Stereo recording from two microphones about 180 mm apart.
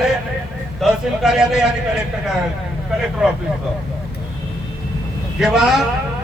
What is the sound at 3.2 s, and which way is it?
Speech, 5° right (ahead or behind).